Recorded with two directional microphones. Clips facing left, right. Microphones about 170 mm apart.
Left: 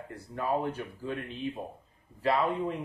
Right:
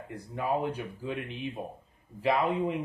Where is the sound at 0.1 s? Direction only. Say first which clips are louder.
Right 1 dB; 15° right (ahead or behind).